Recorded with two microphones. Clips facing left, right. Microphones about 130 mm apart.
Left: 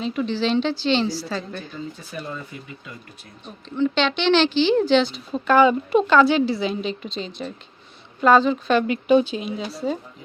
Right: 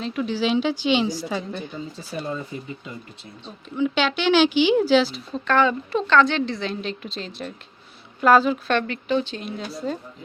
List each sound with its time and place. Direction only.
0.0 s a woman's voice: centre (ahead or behind)
2.1 s speech: 25° right (ahead or behind)
3.8 s a woman's voice: 5° right (ahead or behind)
5.5 s a woman's voice: 10° left (ahead or behind)
8.9 s speech: 15° left (ahead or behind)